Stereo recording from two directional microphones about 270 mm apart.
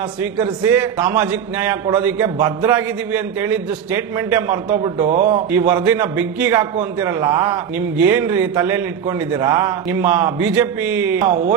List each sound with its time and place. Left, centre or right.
0.2 s a man's voice: centre
5.0 s speech: right
5.5 s a man's voice: centre